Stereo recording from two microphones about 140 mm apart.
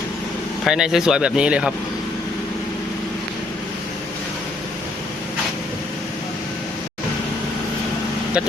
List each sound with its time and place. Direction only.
0.6 s a man's voice: 5° right (ahead or behind)